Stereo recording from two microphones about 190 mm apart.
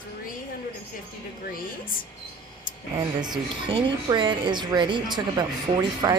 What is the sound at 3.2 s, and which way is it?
Speech, 25° right (ahead or behind).